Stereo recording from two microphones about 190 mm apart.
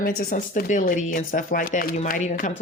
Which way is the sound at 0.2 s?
45° left (ahead or behind).